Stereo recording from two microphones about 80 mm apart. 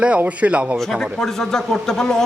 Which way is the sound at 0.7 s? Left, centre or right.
Centre.